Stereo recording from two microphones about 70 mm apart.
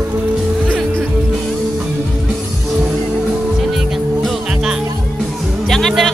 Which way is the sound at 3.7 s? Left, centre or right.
Centre.